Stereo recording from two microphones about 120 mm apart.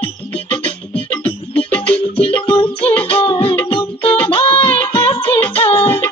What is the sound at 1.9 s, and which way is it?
Music, 50° left (ahead or behind).